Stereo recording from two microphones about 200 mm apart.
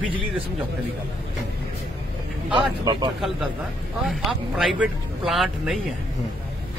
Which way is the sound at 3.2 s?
Centre (ahead or behind).